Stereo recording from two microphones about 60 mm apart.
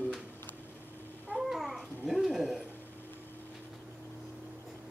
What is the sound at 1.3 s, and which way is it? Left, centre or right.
Babbling, centre.